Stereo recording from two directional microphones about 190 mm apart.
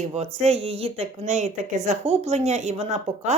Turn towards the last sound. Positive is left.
turn(degrees=-35)  # may be behind; listen again after turning